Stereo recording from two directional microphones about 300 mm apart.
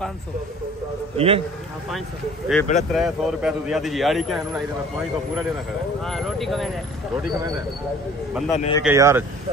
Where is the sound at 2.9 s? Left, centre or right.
Centre.